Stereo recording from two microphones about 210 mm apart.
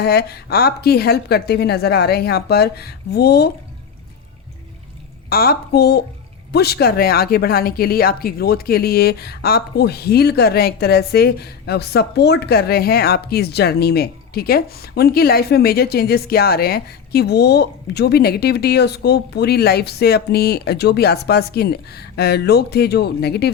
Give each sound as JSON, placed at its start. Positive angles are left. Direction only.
{"t": 0.0, "sound": "speech", "side_deg": 50}
{"t": 5.3, "sound": "speech", "side_deg": 45}